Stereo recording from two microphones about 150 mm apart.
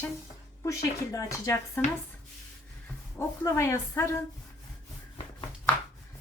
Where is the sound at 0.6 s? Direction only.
20° left (ahead or behind).